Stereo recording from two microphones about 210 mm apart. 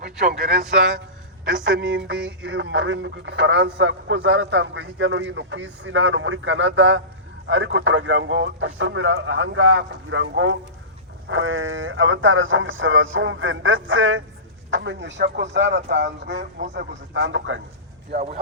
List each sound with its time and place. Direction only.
1.6 s speech: 60° right (ahead or behind)
16.4 s speech: 35° right (ahead or behind)
16.7 s speech: 60° right (ahead or behind)
18.1 s speech: 50° right (ahead or behind)